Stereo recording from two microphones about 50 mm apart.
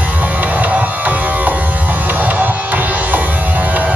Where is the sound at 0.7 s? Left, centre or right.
Right.